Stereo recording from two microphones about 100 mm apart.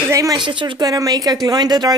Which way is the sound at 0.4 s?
55° right (ahead or behind).